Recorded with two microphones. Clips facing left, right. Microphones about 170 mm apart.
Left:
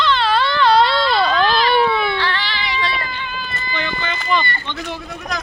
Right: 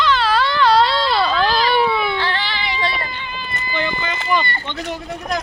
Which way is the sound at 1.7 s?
10° right (ahead or behind).